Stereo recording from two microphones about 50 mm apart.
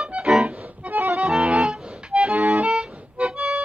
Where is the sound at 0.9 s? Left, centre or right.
Right.